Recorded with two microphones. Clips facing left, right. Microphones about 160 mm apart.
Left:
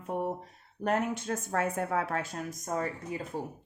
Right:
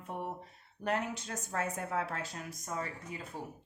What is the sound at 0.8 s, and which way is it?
A woman's voice, 50° left (ahead or behind).